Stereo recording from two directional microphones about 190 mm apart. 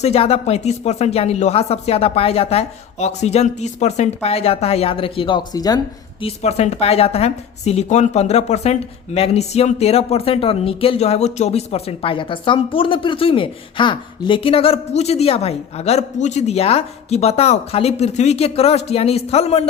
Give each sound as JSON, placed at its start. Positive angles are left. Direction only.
{"t": 0.0, "sound": "a woman's voice", "side_deg": 35}
{"t": 6.2, "sound": "a woman's voice", "side_deg": 35}